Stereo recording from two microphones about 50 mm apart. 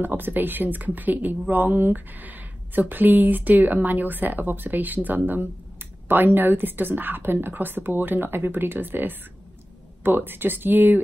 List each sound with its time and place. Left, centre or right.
0.0 s a woman's voice: right